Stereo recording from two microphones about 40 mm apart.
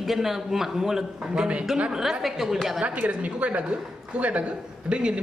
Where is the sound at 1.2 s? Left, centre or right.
Right.